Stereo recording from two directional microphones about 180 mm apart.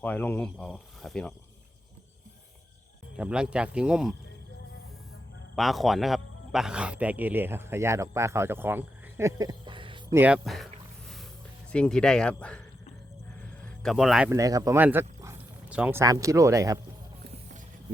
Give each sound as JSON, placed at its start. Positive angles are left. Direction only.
{"t": 0.0, "sound": "speech", "side_deg": 10}
{"t": 3.2, "sound": "speech", "side_deg": -5}
{"t": 5.5, "sound": "speech", "side_deg": 0}
{"t": 10.1, "sound": "speech", "side_deg": -10}
{"t": 11.7, "sound": "speech", "side_deg": 5}
{"t": 13.4, "sound": "a sound", "side_deg": 5}
{"t": 14.3, "sound": "speech", "side_deg": -20}